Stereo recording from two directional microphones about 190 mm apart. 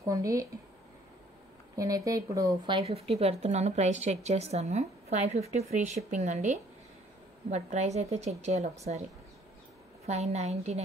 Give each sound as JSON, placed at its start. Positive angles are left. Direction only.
{"t": 0.0, "sound": "speech", "side_deg": -15}
{"t": 1.8, "sound": "speech", "side_deg": -15}
{"t": 10.0, "sound": "speech", "side_deg": -35}